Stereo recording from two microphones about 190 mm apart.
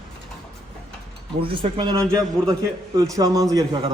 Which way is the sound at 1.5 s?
30° right (ahead or behind).